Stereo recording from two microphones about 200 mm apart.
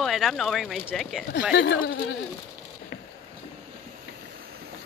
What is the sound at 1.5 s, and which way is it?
Speech, 55° left (ahead or behind).